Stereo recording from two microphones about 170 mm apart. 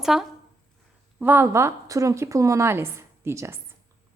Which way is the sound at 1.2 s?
15° right (ahead or behind).